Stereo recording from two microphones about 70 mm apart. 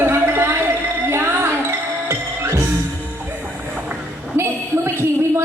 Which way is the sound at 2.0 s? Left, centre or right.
Right.